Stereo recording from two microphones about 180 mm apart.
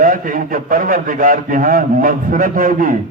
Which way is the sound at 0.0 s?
50° right (ahead or behind).